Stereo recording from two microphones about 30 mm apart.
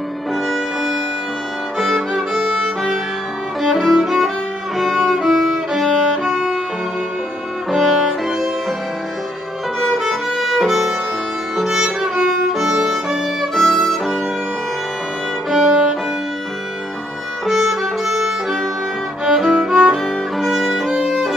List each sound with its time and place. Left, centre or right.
1.8 s violin: centre
3.6 s music: centre
4.7 s violin: centre
6.2 s music: centre
7.7 s music: centre
9.9 s violin: centre
10.7 s music: centre
12.6 s violin: right
13.6 s violin: centre
15.6 s violin: centre
17.5 s music: centre
20.3 s violin: centre